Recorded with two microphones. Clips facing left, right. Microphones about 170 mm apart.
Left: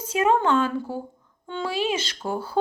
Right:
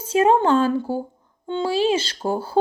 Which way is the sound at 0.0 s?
30° right (ahead or behind).